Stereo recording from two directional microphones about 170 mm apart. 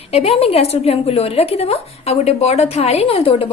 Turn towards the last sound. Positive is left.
turn(degrees=35)  # may be behind; listen again after turning